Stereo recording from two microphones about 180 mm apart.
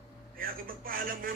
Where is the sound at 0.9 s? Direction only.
50° right (ahead or behind).